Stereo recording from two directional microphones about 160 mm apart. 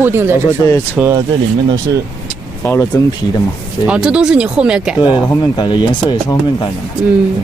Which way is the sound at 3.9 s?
5° right (ahead or behind).